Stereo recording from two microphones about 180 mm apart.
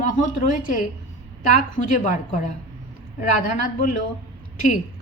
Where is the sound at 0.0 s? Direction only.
45° left (ahead or behind).